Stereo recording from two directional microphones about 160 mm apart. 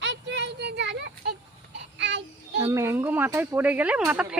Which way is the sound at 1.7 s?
90° right.